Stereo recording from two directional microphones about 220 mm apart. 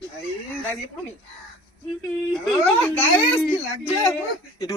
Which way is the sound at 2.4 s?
5° left (ahead or behind).